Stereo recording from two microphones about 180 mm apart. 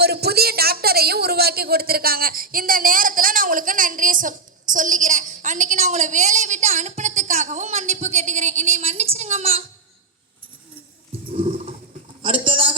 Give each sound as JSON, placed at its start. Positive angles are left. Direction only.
{"t": 0.0, "sound": "speech", "side_deg": -65}
{"t": 11.3, "sound": "roar", "side_deg": -30}
{"t": 12.2, "sound": "a sound", "side_deg": -30}